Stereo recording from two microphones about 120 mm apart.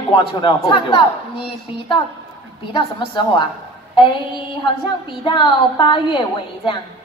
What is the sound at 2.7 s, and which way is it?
A woman's voice, 45° left (ahead or behind).